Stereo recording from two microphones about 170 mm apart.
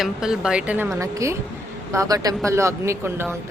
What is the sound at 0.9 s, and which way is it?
A woman's voice, 20° right (ahead or behind).